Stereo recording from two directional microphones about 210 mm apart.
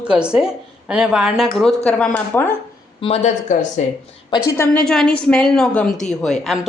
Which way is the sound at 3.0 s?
30° left (ahead or behind).